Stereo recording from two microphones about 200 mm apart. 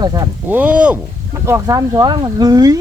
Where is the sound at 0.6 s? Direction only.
5° right (ahead or behind).